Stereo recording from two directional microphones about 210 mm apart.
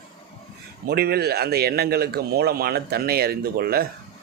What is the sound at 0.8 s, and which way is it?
A man's voice, 50° right (ahead or behind).